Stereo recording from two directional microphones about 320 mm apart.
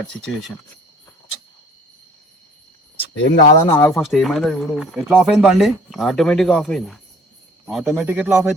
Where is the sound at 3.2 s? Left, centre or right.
Left.